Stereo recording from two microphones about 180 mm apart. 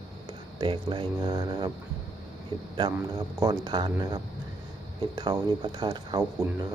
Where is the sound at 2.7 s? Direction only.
20° right (ahead or behind).